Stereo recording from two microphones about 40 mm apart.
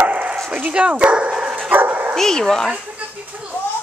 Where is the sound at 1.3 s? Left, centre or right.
Centre.